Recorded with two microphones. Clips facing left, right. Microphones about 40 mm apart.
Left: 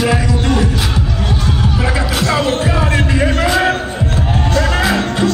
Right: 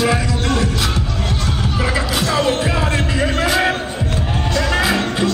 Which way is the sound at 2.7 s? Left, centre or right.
Centre.